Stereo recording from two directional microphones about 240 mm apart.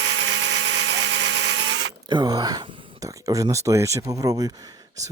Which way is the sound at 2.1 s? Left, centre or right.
Centre.